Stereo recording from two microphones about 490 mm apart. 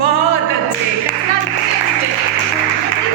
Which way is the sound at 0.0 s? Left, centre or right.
Left.